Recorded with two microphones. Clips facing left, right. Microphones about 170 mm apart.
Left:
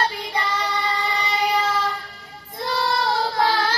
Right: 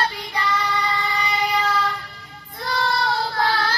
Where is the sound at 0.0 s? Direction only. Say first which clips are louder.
Left 1 dB; 30° left (ahead or behind).